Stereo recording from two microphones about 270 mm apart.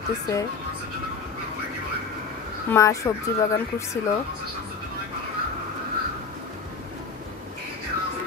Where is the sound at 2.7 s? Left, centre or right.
Centre.